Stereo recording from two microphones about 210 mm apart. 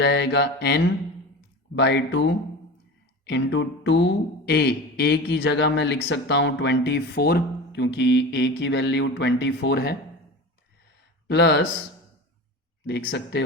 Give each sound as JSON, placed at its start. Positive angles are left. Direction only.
{"t": 0.0, "sound": "mantra", "side_deg": 55}
{"t": 11.3, "sound": "speech", "side_deg": 55}
{"t": 12.8, "sound": "speech", "side_deg": 50}